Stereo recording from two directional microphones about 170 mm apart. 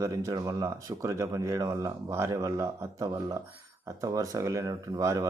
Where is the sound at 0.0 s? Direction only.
20° right (ahead or behind).